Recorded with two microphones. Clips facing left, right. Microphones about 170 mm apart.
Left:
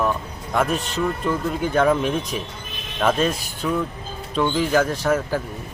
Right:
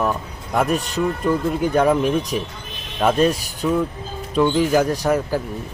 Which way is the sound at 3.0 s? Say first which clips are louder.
Right 3 dB; 10° right (ahead or behind).